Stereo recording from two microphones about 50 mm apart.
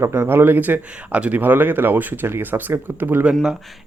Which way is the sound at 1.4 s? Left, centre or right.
Right.